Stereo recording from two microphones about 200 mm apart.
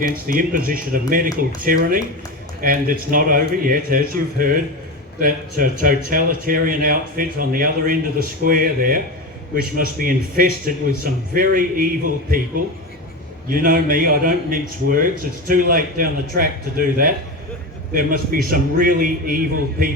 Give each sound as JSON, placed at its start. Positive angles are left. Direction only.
{"t": 0.0, "sound": "a man's voice", "side_deg": -45}